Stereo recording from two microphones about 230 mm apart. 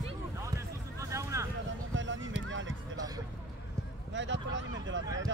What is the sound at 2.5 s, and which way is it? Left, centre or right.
Basketball bounce, right.